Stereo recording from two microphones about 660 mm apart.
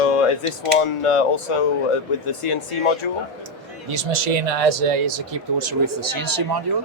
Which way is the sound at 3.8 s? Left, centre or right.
Right.